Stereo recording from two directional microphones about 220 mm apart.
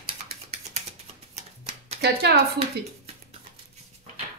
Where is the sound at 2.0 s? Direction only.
50° right (ahead or behind).